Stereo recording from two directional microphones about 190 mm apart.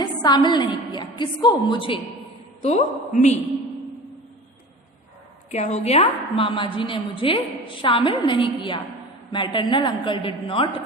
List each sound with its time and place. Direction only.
0.0 s a woman's voice: 20° left (ahead or behind)
2.6 s a woman's voice: 35° left (ahead or behind)
5.5 s a woman's voice: 35° left (ahead or behind)